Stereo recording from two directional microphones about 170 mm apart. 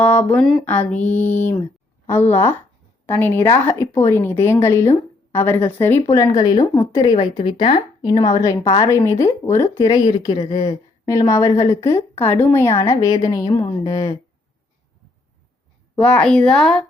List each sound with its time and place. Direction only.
0.0 s a woman's voice: 10° left (ahead or behind)
2.0 s a woman's voice: 10° left (ahead or behind)
16.0 s speech: 5° left (ahead or behind)